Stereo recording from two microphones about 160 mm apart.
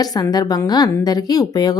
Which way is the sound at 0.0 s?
25° left (ahead or behind).